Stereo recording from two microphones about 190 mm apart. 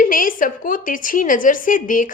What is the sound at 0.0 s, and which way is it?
A woman's voice, 45° left (ahead or behind).